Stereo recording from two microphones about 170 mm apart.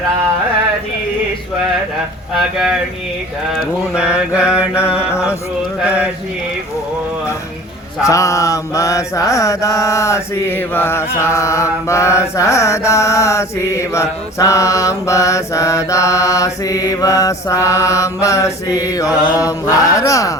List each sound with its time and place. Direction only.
3.5 s mantra: 5° right (ahead or behind)
4.9 s music: 5° right (ahead or behind)
8.0 s mantra: 20° left (ahead or behind)